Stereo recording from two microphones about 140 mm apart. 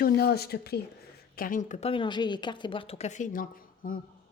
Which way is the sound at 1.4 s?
75° left (ahead or behind).